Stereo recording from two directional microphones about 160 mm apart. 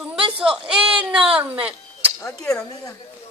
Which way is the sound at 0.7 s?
5° right (ahead or behind).